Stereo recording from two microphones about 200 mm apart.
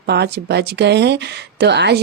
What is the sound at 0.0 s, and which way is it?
Speech, 55° right (ahead or behind).